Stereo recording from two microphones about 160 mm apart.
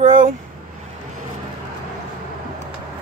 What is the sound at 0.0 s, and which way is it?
Vehicle, 50° right (ahead or behind).